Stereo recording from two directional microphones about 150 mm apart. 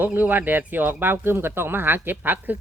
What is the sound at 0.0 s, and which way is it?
Speech, 10° right (ahead or behind).